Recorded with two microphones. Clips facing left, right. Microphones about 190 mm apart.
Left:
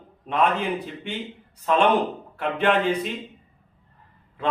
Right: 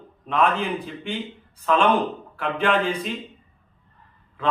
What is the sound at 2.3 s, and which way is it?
Speech, 20° left (ahead or behind).